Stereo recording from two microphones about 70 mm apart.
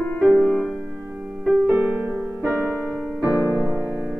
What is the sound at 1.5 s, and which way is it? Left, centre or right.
Music, right.